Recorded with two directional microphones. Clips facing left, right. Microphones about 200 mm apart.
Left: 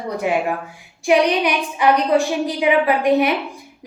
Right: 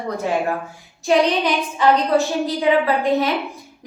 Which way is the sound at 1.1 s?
15° left (ahead or behind).